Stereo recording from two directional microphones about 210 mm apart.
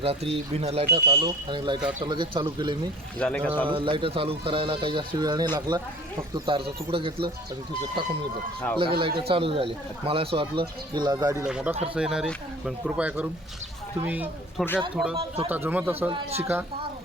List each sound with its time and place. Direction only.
0.0 s speech: 30° right (ahead or behind)
0.9 s speech: 50° right (ahead or behind)
1.1 s speech: 20° right (ahead or behind)
3.2 s speech: 5° left (ahead or behind)
3.7 s speech: 25° right (ahead or behind)
8.8 s speech: 25° right (ahead or behind)
11.4 s speech: 5° right (ahead or behind)
14.6 s speech: centre (ahead or behind)